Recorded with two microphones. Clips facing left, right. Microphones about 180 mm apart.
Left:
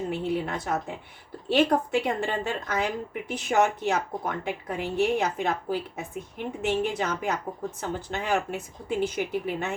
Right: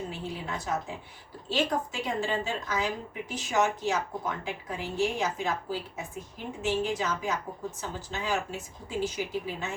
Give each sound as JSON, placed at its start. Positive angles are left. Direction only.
{"t": 0.1, "sound": "a woman's voice", "side_deg": 60}